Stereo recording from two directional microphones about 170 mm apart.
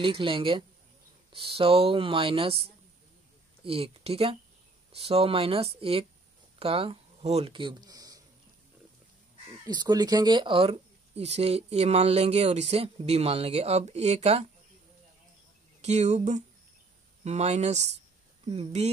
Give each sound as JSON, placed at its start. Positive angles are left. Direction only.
{"t": 0.0, "sound": "speech", "side_deg": -30}
{"t": 9.7, "sound": "speech", "side_deg": -25}
{"t": 15.8, "sound": "speech", "side_deg": -40}